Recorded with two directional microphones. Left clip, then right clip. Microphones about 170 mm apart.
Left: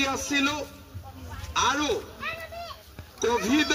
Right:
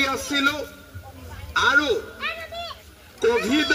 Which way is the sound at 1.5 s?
20° left (ahead or behind).